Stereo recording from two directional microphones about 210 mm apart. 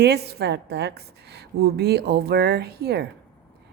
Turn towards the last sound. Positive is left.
turn(degrees=-50)  # may be behind; listen again after turning